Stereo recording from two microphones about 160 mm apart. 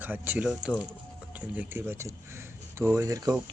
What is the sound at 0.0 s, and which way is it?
Speech, 10° right (ahead or behind).